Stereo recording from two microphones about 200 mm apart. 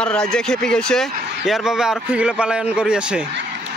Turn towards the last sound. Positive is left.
turn(degrees=-5)  # may be behind; listen again after turning